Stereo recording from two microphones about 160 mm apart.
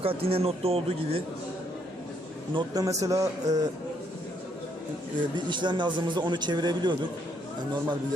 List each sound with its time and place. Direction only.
0.0 s speech: 35° right (ahead or behind)
2.6 s speech: 25° right (ahead or behind)
5.5 s speech: 30° right (ahead or behind)